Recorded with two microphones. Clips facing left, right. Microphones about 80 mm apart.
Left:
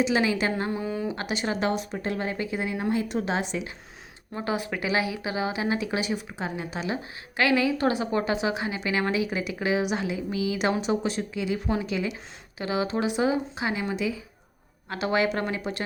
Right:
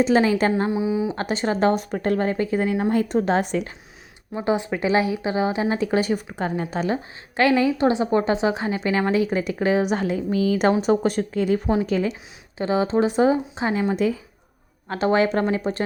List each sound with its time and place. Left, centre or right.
0.0 s a woman's voice: right
0.7 s speech: centre
1.1 s a woman's voice: right
2.9 s speech: right
4.4 s speech: right
6.7 s a woman's voice: right